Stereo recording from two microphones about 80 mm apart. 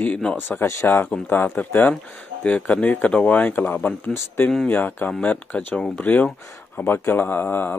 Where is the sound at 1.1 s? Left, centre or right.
Left.